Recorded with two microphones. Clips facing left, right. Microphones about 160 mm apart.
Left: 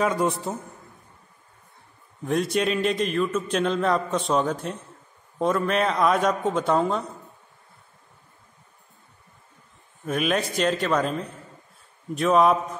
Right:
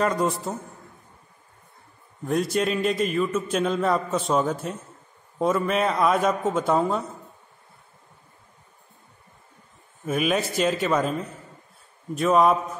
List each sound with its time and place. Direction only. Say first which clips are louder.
0.0 s a man's voice: even; centre (ahead or behind)
2.2 s a man's voice: even; centre (ahead or behind)
10.0 s a man's voice: right 1 dB; 5° right (ahead or behind)